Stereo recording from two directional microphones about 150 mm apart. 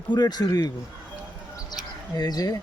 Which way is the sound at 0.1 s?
25° left (ahead or behind).